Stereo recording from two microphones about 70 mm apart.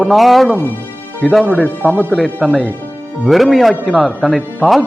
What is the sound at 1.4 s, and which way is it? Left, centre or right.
Speech, centre.